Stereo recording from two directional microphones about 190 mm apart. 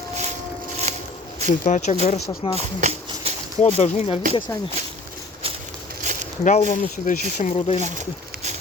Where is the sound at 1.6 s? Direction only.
40° left (ahead or behind).